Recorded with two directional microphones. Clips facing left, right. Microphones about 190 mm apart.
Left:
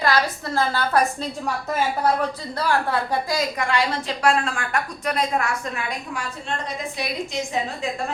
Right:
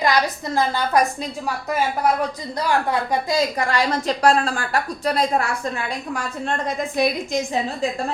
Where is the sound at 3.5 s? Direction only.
40° right (ahead or behind).